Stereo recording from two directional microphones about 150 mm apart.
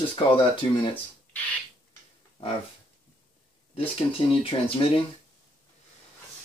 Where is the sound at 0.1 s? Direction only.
35° left (ahead or behind).